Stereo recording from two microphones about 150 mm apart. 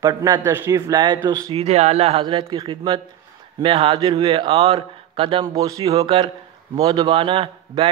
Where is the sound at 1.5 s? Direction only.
45° right (ahead or behind).